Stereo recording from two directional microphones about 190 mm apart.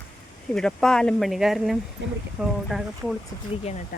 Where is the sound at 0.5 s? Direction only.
5° left (ahead or behind).